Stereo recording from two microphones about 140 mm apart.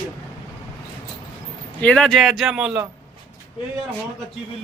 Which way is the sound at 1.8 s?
5° left (ahead or behind).